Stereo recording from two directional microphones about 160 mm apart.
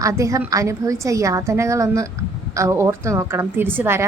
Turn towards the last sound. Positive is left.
turn(degrees=-15)  # may be behind; listen again after turning